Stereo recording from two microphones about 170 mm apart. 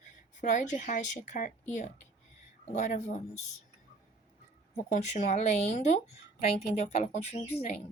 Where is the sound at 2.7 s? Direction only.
45° left (ahead or behind).